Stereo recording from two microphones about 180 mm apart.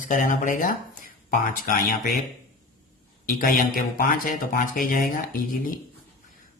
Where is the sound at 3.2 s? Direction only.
50° left (ahead or behind).